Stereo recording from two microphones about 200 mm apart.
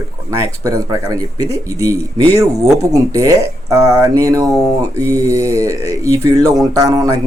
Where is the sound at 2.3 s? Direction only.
15° right (ahead or behind).